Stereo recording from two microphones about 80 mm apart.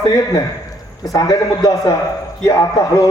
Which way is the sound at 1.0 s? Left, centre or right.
Left.